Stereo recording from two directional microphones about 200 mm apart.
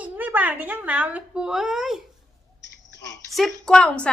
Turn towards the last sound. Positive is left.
turn(degrees=5)  # may be behind; listen again after turning